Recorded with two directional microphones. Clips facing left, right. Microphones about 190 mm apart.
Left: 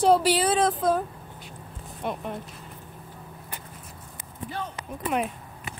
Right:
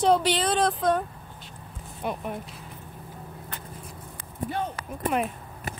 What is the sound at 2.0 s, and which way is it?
Speech, centre (ahead or behind).